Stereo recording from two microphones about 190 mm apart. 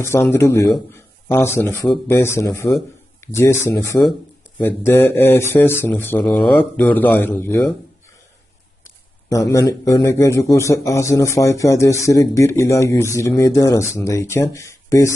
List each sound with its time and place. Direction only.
0.0 s a man's voice: 15° left (ahead or behind)
9.5 s a man's voice: 20° left (ahead or behind)